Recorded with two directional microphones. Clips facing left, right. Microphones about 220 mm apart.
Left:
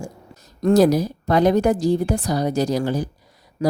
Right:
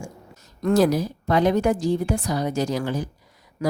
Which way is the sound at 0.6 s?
40° left (ahead or behind).